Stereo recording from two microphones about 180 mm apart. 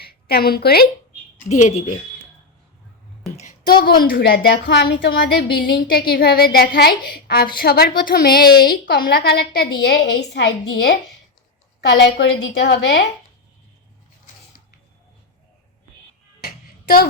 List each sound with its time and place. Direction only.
0.0 s a woman's voice: 60° left (ahead or behind)
1.5 s speech: 40° left (ahead or behind)
3.7 s a woman's voice: 55° left (ahead or behind); by 13.0 s 80° left
16.4 s a sound: 55° left (ahead or behind)